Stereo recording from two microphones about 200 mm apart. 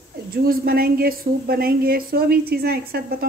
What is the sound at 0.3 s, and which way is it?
A woman's voice, 50° right (ahead or behind).